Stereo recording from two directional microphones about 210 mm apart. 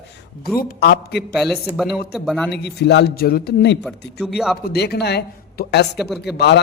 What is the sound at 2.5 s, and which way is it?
A man's voice, 50° left (ahead or behind).